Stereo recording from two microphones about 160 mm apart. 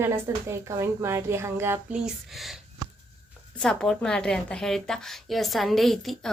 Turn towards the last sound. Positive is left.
turn(degrees=0)  # may be behind; listen again after turning